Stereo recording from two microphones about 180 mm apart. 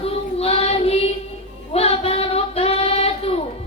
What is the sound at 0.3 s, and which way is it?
Child singing, 35° left (ahead or behind).